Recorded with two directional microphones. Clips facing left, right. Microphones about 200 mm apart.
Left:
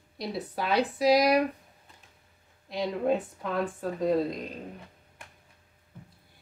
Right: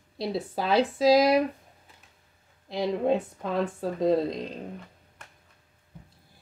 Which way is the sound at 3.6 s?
20° right (ahead or behind).